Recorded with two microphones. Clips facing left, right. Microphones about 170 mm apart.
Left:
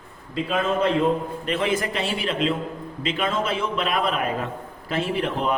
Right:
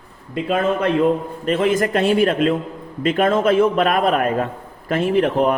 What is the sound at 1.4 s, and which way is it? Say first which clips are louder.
Speech: right 8 dB; 45° right (ahead or behind).